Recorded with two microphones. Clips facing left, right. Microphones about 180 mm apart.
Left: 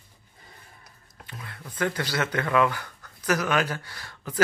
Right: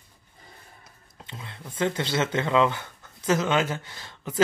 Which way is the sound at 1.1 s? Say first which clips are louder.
Right 1 dB; 25° right (ahead or behind).